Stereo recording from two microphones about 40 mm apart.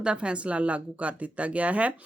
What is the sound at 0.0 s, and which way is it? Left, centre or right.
Speech, right.